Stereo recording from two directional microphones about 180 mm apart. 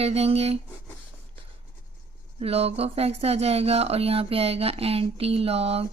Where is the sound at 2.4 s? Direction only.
35° right (ahead or behind).